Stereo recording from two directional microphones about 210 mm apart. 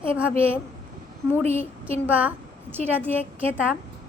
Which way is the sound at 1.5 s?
10° left (ahead or behind).